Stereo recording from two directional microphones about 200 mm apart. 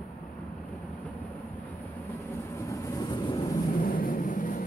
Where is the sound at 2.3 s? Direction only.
15° left (ahead or behind).